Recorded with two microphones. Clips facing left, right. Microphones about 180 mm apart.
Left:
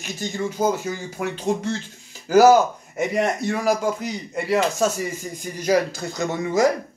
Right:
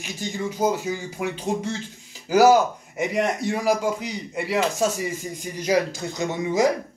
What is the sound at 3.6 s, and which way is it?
Speech, 45° left (ahead or behind).